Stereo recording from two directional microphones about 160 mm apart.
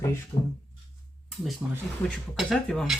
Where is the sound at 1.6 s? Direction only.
10° right (ahead or behind).